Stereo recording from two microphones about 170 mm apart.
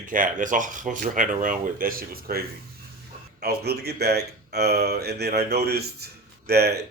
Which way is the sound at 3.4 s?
70° right (ahead or behind).